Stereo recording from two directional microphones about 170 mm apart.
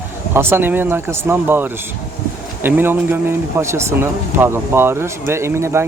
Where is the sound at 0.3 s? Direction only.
10° right (ahead or behind).